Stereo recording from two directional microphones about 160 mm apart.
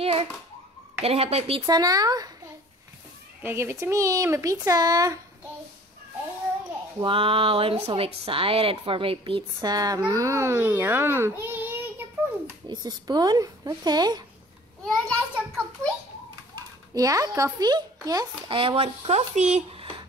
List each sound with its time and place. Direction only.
0.0 s a child's voice: 35° right (ahead or behind)
1.7 s speech: 25° right (ahead or behind)
3.4 s speech: 15° right (ahead or behind)
7.0 s a child's voice: 35° right (ahead or behind); by 11.7 s 15° right (ahead or behind)
12.8 s speech: 25° right (ahead or behind)
14.9 s a child's voice: 5° left (ahead or behind)
16.5 s a child's voice: 20° right (ahead or behind)
18.6 s speech: 35° right (ahead or behind)